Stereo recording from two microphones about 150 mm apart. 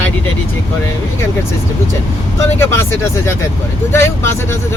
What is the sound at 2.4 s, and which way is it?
Speech, 20° left (ahead or behind).